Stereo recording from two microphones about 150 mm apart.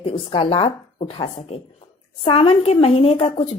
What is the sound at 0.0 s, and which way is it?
Speech, 40° left (ahead or behind).